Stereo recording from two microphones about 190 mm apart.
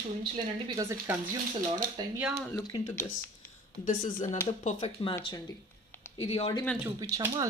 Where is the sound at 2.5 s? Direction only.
15° left (ahead or behind).